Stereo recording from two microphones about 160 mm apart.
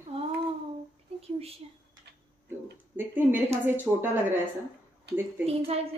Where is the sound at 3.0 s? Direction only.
10° right (ahead or behind).